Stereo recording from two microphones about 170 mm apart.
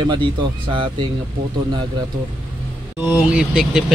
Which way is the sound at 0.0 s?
30° right (ahead or behind).